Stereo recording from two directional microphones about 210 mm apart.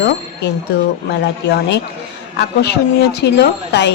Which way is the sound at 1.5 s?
50° left (ahead or behind).